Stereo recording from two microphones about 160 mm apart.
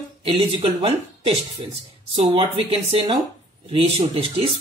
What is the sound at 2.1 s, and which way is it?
Speech, 35° right (ahead or behind).